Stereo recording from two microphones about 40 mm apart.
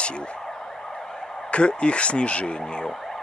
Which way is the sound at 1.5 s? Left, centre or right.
Left.